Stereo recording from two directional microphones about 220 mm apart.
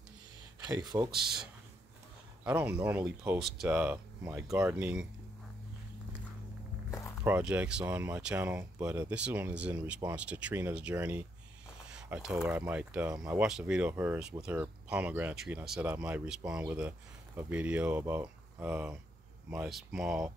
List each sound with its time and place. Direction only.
0.7 s speech: 15° right (ahead or behind)
1.1 s speech: centre (ahead or behind)
7.2 s speech: 10° right (ahead or behind)